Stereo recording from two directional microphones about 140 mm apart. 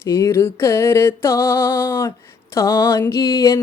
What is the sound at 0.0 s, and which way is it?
Music, 20° left (ahead or behind).